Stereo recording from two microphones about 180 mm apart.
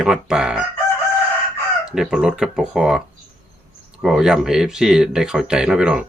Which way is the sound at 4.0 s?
Centre (ahead or behind).